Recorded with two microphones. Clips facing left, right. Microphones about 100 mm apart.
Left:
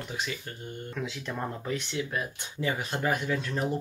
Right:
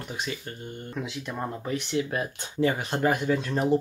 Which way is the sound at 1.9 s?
35° right (ahead or behind).